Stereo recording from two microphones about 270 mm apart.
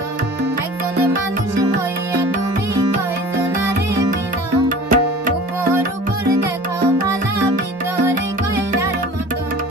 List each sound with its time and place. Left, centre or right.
4.6 s music: right